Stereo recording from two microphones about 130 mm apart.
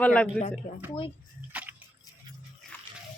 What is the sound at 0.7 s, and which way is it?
Speech, 60° left (ahead or behind).